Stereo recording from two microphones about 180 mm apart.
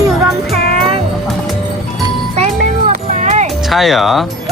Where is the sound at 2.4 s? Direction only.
40° right (ahead or behind).